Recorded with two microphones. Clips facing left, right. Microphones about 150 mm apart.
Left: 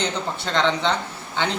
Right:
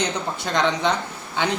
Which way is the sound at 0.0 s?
15° right (ahead or behind).